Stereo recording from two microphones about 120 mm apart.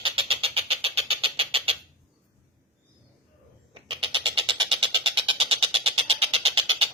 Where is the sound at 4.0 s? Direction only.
50° right (ahead or behind).